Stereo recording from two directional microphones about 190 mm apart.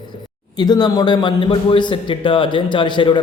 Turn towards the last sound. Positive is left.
turn(degrees=25)  # may be behind; listen again after turning